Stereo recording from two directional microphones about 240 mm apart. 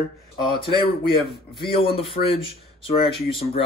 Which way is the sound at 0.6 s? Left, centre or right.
Left.